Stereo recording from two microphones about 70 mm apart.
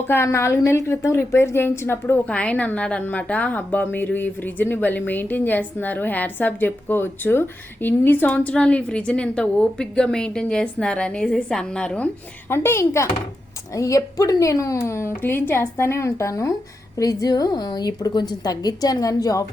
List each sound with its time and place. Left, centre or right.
0.1 s a woman's voice: left
2.2 s a woman's voice: centre
12.5 s a woman's voice: left
13.7 s speech: left
17.0 s a woman's voice: left